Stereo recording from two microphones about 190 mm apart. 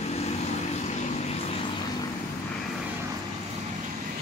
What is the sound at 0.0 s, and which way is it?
Vehicle, 35° left (ahead or behind).